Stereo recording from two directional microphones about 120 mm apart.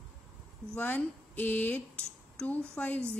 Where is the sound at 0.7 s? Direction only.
15° left (ahead or behind).